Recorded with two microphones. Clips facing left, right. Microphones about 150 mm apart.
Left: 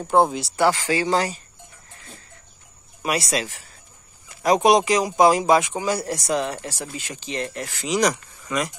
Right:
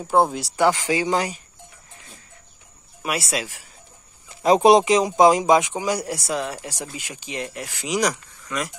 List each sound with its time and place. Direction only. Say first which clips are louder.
0.0 s speech: left 1 dB; 5° right (ahead or behind)
0.6 s speech: right 1 dB; 15° right (ahead or behind)
3.0 s speech: left 2 dB; 5° right (ahead or behind)
4.6 s speech: right 3 dB; 25° right (ahead or behind); by 8.1 s 10° right (ahead or behind)
8.1 s speech: left 3 dB; 5° left (ahead or behind)